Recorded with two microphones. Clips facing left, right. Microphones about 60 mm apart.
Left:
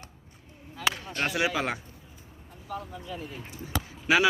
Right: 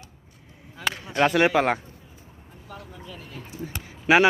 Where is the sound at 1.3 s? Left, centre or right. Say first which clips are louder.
Right 6 dB; right.